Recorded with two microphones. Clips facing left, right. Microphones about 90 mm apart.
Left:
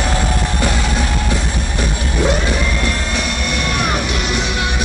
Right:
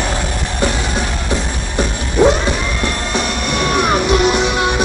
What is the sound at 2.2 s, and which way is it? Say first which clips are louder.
Music: right 6 dB; 25° right (ahead or behind).